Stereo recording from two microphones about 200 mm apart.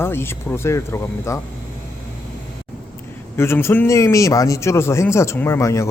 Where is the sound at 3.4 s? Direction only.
10° left (ahead or behind).